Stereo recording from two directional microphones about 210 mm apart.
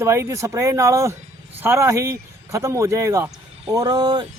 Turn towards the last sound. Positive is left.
turn(degrees=-20)  # may be behind; listen again after turning